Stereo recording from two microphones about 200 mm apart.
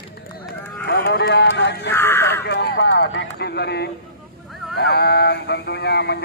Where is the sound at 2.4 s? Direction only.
55° left (ahead or behind).